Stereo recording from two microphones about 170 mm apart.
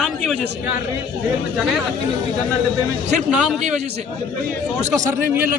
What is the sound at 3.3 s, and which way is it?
Speech, 5° right (ahead or behind).